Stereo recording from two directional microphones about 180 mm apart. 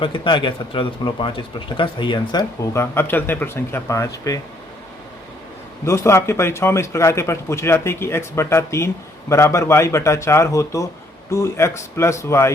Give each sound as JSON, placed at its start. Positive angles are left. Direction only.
{"t": 0.0, "sound": "speech", "side_deg": 30}
{"t": 2.9, "sound": "a man's voice", "side_deg": 10}
{"t": 5.8, "sound": "a man's voice", "side_deg": 15}